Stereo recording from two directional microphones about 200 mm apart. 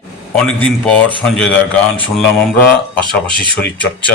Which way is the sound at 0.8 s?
5° left (ahead or behind).